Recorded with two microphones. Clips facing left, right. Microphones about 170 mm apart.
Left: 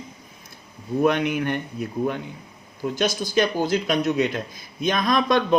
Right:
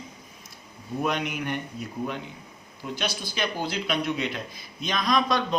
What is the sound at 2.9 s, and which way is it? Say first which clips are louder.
Speech: left 9 dB; 45° left (ahead or behind).